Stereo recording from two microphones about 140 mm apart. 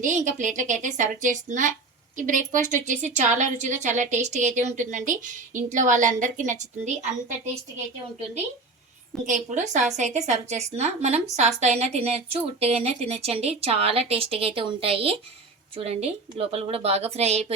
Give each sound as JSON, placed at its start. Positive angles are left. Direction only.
{"t": 0.0, "sound": "a woman's voice", "side_deg": -60}
{"t": 9.2, "sound": "a woman's voice", "side_deg": -65}